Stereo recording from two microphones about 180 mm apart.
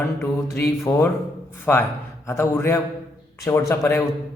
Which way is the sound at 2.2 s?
15° left (ahead or behind).